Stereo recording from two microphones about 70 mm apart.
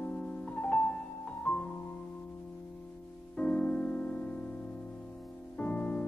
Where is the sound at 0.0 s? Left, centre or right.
Centre.